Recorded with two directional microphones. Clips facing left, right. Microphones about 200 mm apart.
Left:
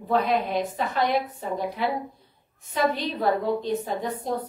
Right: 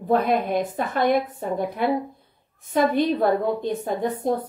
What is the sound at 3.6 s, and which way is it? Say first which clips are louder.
Speech: right 3 dB; 55° right (ahead or behind).